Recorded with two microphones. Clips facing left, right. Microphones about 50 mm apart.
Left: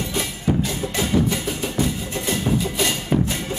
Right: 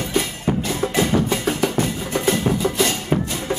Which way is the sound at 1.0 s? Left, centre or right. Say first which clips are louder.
Right 2 dB; right.